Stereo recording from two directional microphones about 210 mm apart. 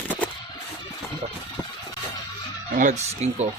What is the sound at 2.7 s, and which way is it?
Speech, 35° right (ahead or behind).